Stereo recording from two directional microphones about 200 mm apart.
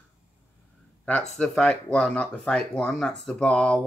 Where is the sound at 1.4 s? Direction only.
5° left (ahead or behind).